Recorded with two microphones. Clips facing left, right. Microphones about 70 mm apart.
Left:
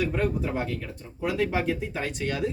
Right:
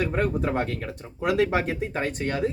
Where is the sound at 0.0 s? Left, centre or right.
Right.